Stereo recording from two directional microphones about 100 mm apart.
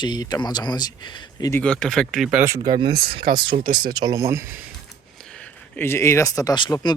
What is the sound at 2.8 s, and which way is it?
Speech, 55° right (ahead or behind).